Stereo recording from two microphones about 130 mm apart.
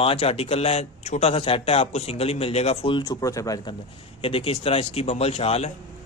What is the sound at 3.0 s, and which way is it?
Speech, 25° left (ahead or behind).